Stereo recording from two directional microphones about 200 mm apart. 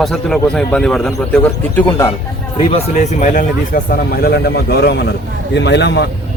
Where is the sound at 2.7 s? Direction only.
35° left (ahead or behind).